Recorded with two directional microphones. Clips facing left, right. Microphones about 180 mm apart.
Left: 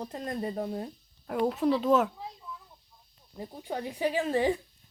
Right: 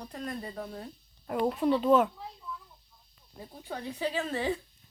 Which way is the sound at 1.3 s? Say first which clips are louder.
Left 1 dB; centre (ahead or behind).